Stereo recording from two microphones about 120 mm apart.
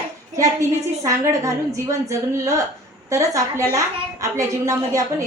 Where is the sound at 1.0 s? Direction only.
25° right (ahead or behind).